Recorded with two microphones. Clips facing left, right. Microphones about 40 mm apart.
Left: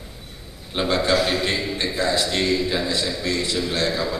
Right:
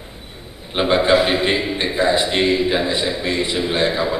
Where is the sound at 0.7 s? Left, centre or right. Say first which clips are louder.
Right 5 dB; right.